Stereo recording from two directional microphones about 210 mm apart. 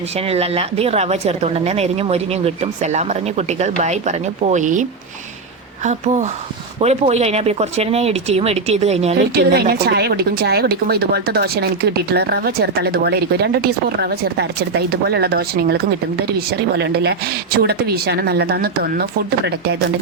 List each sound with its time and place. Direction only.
0.3 s speech: 30° right (ahead or behind)
9.3 s speech: 50° right (ahead or behind)